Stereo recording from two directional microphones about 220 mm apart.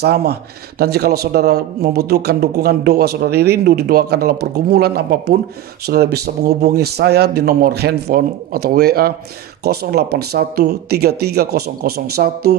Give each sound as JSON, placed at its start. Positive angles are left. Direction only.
{"t": 0.0, "sound": "a man's voice", "side_deg": -45}